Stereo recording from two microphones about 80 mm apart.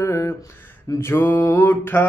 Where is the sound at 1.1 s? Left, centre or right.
Left.